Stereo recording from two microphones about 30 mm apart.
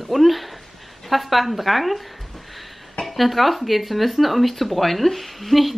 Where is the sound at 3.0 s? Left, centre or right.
Centre.